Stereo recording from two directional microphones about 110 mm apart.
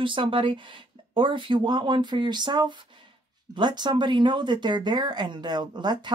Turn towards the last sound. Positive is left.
turn(degrees=-40)  # may be behind; listen again after turning